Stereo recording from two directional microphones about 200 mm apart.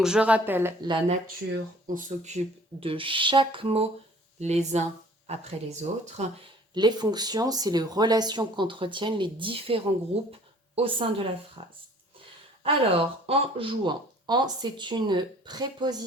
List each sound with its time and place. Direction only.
0.0 s speech: 5° right (ahead or behind)
0.9 s speech: 25° right (ahead or behind)
1.9 s speech: 40° right (ahead or behind)
2.8 s speech: 25° right (ahead or behind)
6.7 s a woman's voice: 20° right (ahead or behind)